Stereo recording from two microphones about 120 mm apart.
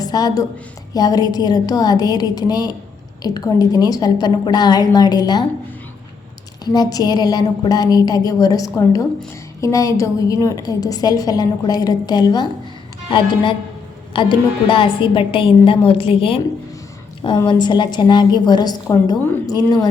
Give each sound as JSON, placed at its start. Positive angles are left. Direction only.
{"t": 0.0, "sound": "a woman's voice", "side_deg": 30}
{"t": 6.7, "sound": "a woman's voice", "side_deg": 35}
{"t": 17.2, "sound": "a woman's voice", "side_deg": 40}